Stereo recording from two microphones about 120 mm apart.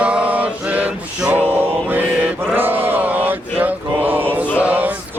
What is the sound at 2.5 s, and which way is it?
Chant, 15° right (ahead or behind).